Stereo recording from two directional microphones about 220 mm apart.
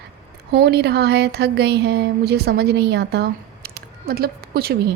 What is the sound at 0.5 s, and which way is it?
A woman's voice, 45° right (ahead or behind).